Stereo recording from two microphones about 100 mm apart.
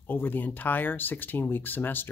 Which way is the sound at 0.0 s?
20° left (ahead or behind).